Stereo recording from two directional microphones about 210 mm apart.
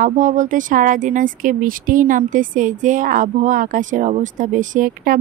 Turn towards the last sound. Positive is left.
turn(degrees=-40)  # may be behind; listen again after turning